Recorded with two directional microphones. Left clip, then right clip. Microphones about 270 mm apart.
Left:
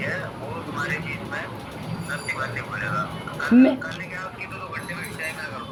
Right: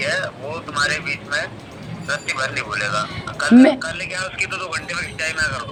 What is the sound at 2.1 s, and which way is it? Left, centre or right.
A woman's voice, right.